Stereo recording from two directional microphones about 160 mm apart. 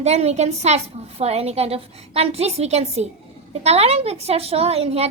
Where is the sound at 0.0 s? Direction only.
40° right (ahead or behind).